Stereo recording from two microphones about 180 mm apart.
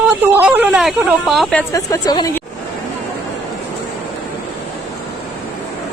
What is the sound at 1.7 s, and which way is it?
Speech, 20° left (ahead or behind).